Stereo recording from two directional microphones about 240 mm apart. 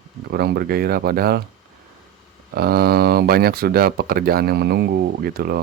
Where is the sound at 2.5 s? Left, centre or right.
Right.